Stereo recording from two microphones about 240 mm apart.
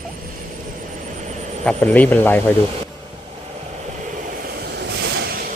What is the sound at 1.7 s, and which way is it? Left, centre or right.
Speech, centre.